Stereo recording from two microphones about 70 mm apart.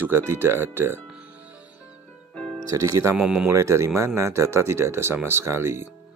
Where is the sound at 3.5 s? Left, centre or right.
Right.